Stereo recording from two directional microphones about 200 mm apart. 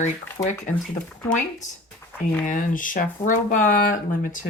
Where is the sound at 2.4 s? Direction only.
40° left (ahead or behind).